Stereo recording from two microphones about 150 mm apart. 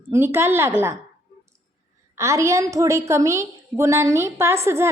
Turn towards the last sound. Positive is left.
turn(degrees=-15)  # may be behind; listen again after turning